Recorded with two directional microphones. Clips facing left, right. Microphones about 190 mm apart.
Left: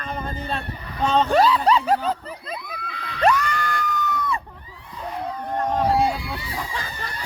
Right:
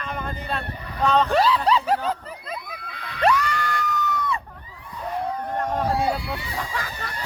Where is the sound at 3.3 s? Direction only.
50° left (ahead or behind).